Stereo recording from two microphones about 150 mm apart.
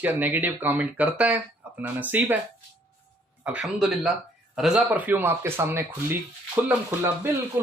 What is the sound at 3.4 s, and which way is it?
Speech, 5° right (ahead or behind).